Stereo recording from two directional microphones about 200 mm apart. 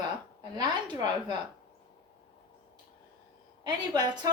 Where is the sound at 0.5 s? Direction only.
20° right (ahead or behind).